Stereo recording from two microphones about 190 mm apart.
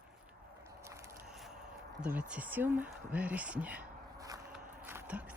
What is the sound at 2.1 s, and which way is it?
Speech, 10° right (ahead or behind).